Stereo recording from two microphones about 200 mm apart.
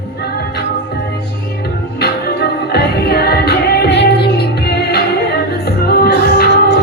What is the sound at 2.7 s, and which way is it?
Music, 50° left (ahead or behind).